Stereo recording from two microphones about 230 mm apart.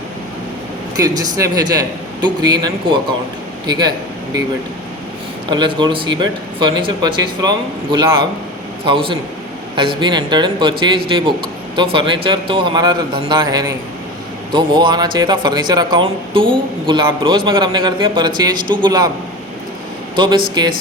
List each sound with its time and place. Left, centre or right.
0.9 s a man's voice: centre
5.5 s a man's voice: centre
11.8 s a man's voice: right
20.1 s a man's voice: right